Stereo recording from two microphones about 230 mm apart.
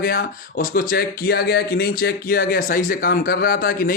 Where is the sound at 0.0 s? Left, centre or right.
Left.